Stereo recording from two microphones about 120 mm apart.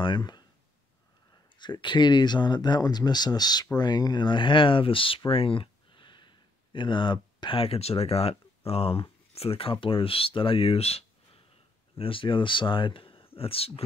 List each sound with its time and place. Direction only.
0.0 s speech: 40° left (ahead or behind)
1.6 s speech: 40° left (ahead or behind)